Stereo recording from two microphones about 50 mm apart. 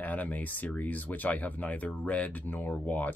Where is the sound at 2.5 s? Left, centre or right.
Left.